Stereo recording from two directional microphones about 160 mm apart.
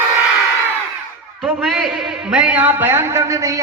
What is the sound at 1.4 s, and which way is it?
A man's voice, centre (ahead or behind).